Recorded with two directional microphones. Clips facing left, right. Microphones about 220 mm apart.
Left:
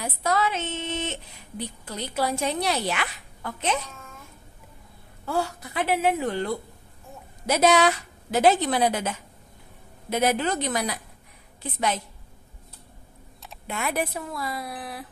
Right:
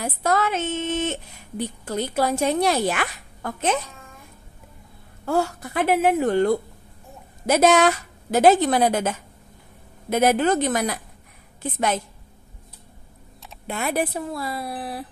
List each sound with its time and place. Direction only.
0.0 s a woman's voice: 50° right (ahead or behind)
5.2 s a woman's voice: 45° right (ahead or behind)
13.7 s a woman's voice: 30° right (ahead or behind)